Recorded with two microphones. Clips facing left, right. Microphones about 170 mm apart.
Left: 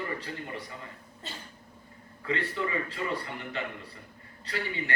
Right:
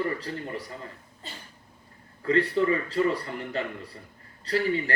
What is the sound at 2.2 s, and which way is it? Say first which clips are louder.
A man's voice: right 8 dB; 40° right (ahead or behind).